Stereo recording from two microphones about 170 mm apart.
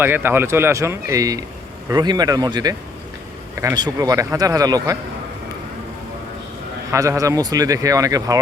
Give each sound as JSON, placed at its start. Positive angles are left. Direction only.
{"t": 0.0, "sound": "speech", "side_deg": -10}
{"t": 6.9, "sound": "speech", "side_deg": -20}